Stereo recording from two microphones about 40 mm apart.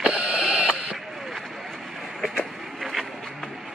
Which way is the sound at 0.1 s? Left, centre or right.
Right.